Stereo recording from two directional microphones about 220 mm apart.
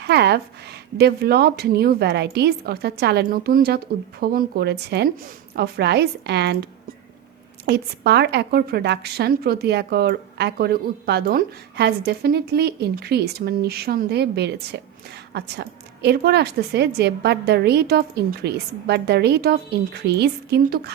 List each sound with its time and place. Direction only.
0.0 s a woman's voice: 50° right (ahead or behind)